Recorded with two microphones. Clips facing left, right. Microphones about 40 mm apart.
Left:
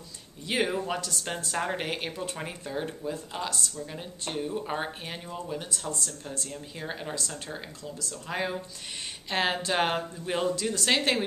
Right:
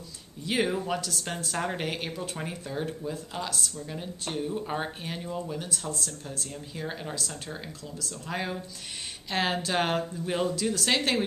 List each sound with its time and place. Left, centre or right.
0.5 s speech: centre